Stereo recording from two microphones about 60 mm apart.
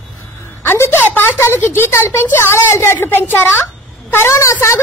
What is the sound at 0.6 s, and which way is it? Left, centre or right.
A woman's voice, left.